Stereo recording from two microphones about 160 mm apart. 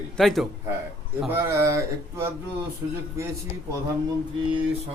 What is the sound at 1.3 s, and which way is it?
Speech, 15° right (ahead or behind).